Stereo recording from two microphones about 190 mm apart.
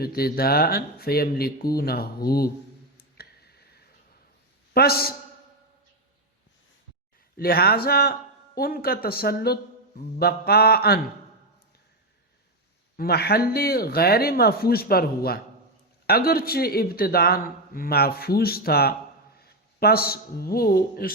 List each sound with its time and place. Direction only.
0.0 s speech: 55° left (ahead or behind)
3.0 s a sound: 55° left (ahead or behind)
4.7 s a man's voice: 55° left (ahead or behind)
7.3 s speech: 50° left (ahead or behind)
13.0 s speech: 55° left (ahead or behind)